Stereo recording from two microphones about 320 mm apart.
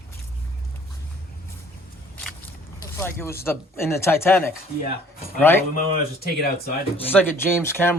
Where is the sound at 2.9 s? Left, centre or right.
Centre.